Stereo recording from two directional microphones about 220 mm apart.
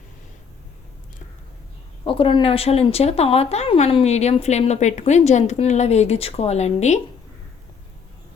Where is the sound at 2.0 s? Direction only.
25° left (ahead or behind).